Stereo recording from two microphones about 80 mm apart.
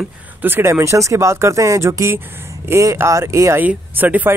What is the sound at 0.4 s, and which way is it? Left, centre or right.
Speech, right.